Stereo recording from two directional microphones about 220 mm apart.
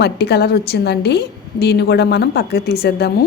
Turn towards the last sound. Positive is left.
turn(degrees=45)  # may be behind; listen again after turning